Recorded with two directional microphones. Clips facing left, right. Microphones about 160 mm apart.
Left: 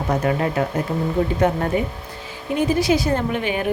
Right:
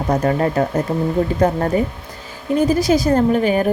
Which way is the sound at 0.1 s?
40° right (ahead or behind).